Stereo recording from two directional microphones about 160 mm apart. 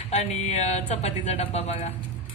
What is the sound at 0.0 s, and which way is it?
Speech, 45° left (ahead or behind).